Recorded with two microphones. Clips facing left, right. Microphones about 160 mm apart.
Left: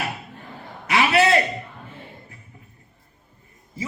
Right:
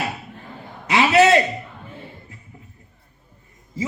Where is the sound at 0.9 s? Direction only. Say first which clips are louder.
Right 4 dB; 20° right (ahead or behind).